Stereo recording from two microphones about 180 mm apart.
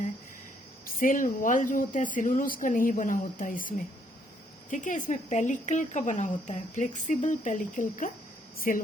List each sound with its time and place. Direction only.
0.9 s speech: 50° left (ahead or behind)